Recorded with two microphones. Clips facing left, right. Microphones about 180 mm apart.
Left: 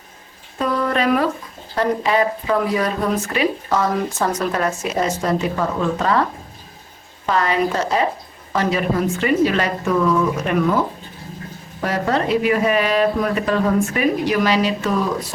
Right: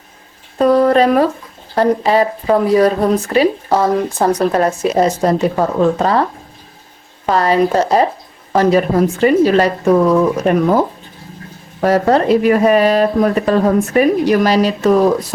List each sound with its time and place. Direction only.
0.6 s speech: 40° right (ahead or behind)
7.3 s speech: 35° right (ahead or behind)